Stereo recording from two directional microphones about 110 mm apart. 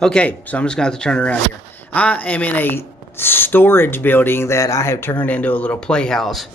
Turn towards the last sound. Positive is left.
turn(degrees=0)  # may be behind; listen again after turning